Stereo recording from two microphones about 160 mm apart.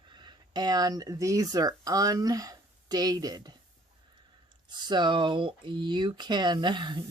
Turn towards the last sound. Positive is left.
turn(degrees=-30)  # may be behind; listen again after turning